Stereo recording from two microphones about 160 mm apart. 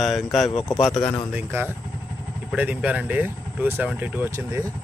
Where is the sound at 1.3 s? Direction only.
15° right (ahead or behind).